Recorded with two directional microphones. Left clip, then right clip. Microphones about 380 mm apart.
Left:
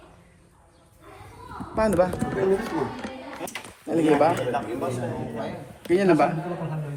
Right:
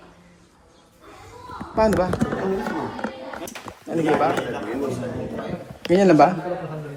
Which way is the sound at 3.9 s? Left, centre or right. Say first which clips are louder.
Left 1 dB; centre.